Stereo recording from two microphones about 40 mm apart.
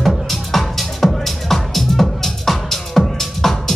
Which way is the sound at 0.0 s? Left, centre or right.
Centre.